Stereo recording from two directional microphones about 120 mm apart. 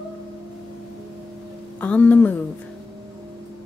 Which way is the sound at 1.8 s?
15° left (ahead or behind).